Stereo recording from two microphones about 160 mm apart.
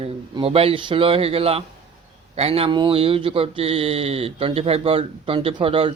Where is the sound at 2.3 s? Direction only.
40° right (ahead or behind).